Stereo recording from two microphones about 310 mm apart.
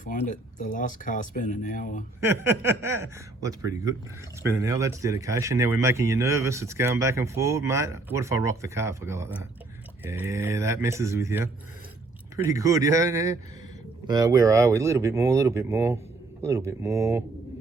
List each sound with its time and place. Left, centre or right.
0.0 s speech: left
2.2 s speech: centre